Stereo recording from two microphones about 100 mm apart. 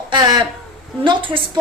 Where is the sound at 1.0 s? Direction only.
55° right (ahead or behind).